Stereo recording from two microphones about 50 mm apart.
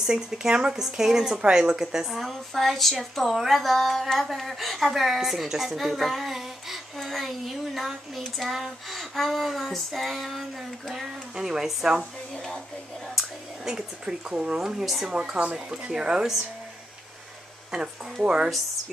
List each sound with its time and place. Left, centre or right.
0.0 s speech: centre
11.3 s speech: centre
12.4 s a woman's voice: centre
13.1 s speech: centre
15.0 s speech: centre
18.2 s speech: centre